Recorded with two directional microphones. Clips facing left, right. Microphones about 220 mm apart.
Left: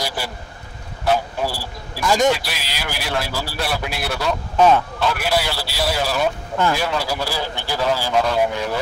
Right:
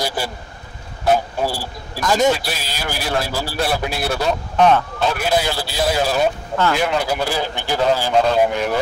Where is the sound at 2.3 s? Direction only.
45° right (ahead or behind).